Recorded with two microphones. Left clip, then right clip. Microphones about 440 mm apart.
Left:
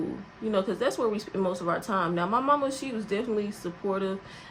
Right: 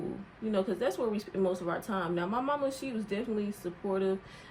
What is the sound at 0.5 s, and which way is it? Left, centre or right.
Speech, centre.